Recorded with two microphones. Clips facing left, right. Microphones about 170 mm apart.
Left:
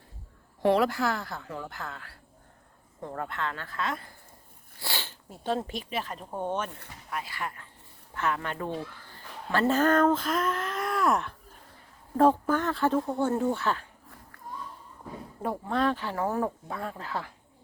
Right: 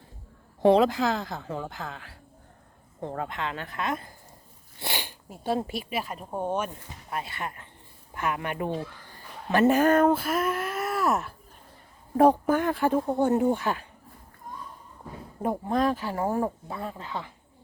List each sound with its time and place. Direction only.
0.6 s speech: 20° right (ahead or behind)
1.7 s speech: 20° right (ahead or behind)
7.1 s speech: 25° right (ahead or behind); by 11.3 s 5° right (ahead or behind)
12.1 s speech: 15° right (ahead or behind)
15.7 s speech: 10° right (ahead or behind)